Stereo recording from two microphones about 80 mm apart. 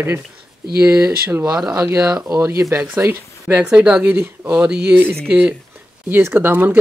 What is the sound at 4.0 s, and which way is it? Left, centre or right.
Speech, right.